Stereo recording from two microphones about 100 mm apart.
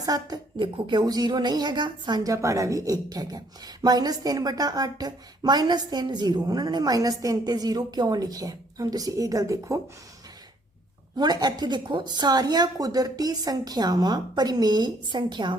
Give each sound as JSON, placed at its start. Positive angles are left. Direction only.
{"t": 0.0, "sound": "a woman's voice", "side_deg": -40}
{"t": 0.6, "sound": "a woman's voice", "side_deg": -50}
{"t": 11.2, "sound": "speech", "side_deg": -45}